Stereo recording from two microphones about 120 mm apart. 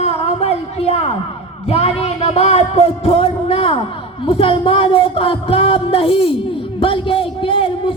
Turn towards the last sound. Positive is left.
turn(degrees=50)  # may be behind; listen again after turning